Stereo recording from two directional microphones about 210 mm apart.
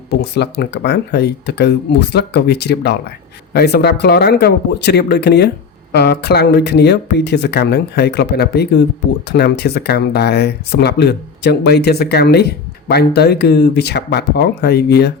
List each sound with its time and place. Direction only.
0.1 s speech: 50° left (ahead or behind)